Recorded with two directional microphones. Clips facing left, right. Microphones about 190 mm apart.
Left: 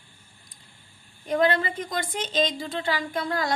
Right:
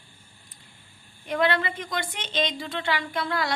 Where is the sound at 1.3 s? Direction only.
40° left (ahead or behind).